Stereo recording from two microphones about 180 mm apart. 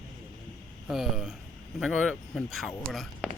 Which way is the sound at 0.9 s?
Centre (ahead or behind).